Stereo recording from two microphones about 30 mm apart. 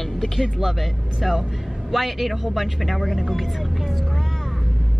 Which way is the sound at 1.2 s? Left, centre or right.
Centre.